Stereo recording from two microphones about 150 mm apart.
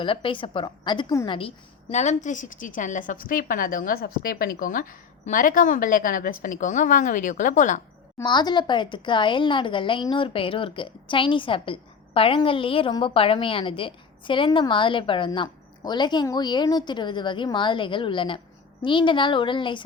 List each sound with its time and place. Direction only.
0.0 s a woman's voice: 35° left (ahead or behind)
1.4 s a woman's voice: 45° left (ahead or behind)
8.2 s a woman's voice: 30° left (ahead or behind)